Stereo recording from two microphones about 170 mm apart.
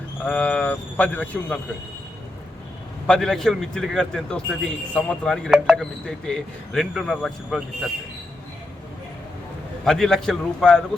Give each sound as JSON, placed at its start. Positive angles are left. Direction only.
{"t": 0.3, "sound": "a man's voice", "side_deg": 5}
{"t": 3.1, "sound": "speech", "side_deg": 5}
{"t": 9.8, "sound": "speech", "side_deg": 5}